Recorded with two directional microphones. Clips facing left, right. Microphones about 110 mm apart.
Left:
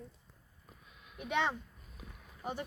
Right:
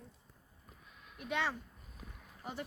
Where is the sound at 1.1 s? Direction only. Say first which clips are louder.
Left 3 dB; 20° left (ahead or behind).